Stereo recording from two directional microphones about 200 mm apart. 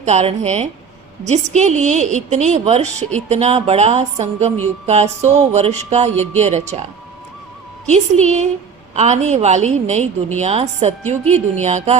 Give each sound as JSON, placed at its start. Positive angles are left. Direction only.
{"t": 0.0, "sound": "a woman's voice", "side_deg": -35}
{"t": 7.9, "sound": "a woman's voice", "side_deg": -35}
{"t": 11.3, "sound": "speech", "side_deg": 10}
{"t": 11.6, "sound": "a woman's voice", "side_deg": -35}